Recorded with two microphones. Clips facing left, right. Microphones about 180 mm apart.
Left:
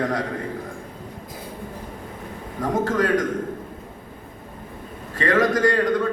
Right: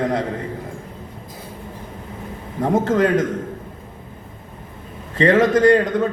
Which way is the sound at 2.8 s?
25° right (ahead or behind).